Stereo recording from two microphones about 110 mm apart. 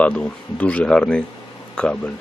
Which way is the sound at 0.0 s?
10° left (ahead or behind).